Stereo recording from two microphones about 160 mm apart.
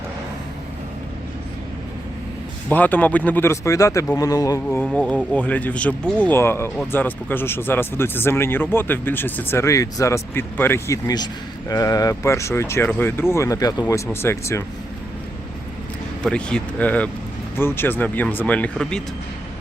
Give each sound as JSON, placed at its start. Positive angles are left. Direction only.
{"t": 2.6, "sound": "speech", "side_deg": 10}
{"t": 4.9, "sound": "speech", "side_deg": 5}
{"t": 16.2, "sound": "speech", "side_deg": 5}